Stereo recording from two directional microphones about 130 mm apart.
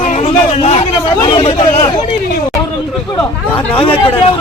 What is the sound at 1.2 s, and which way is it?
Speech, 40° left (ahead or behind).